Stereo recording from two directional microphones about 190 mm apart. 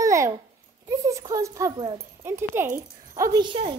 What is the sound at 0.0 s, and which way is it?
Babbling, 15° right (ahead or behind).